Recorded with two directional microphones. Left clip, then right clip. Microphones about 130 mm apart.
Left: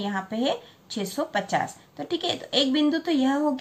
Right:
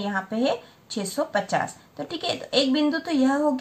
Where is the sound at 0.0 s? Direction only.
45° right (ahead or behind).